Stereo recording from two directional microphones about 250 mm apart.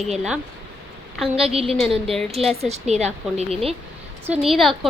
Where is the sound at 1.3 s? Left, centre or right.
Right.